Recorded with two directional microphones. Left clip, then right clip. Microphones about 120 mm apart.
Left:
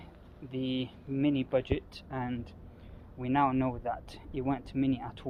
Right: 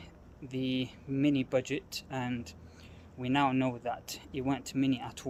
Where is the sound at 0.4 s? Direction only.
35° right (ahead or behind).